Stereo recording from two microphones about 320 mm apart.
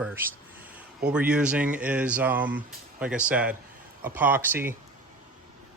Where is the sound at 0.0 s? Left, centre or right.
Centre.